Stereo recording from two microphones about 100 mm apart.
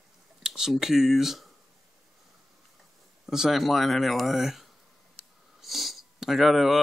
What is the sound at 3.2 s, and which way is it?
Speech, 5° right (ahead or behind).